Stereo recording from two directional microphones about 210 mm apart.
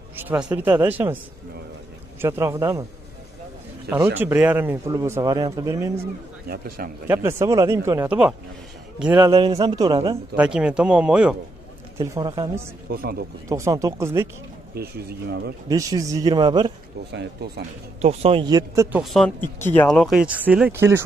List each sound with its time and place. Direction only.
0.1 s speech: 10° right (ahead or behind)
2.2 s speech: 15° right (ahead or behind)
4.2 s speech: 10° right (ahead or behind)
7.1 s speech: 10° right (ahead or behind)
9.3 s a man's voice: 25° right (ahead or behind)
10.3 s speech: 5° right (ahead or behind)
12.0 s speech: 15° right (ahead or behind)
12.9 s speech: 45° right (ahead or behind)
13.5 s speech: 15° right (ahead or behind)
14.7 s speech: 50° right (ahead or behind)
15.7 s speech: 15° right (ahead or behind)
17.1 s speech: 50° right (ahead or behind)
18.0 s speech: 25° right (ahead or behind); by 21.0 s 10° right (ahead or behind)